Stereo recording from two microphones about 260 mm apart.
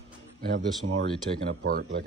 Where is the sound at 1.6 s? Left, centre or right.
Right.